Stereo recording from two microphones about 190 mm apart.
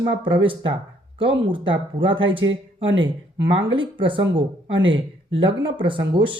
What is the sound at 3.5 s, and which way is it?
Speech, 25° right (ahead or behind).